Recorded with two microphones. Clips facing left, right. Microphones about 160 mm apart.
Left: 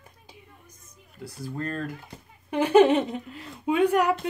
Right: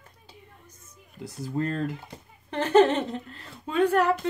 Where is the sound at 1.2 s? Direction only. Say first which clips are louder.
Right 4 dB; 20° right (ahead or behind).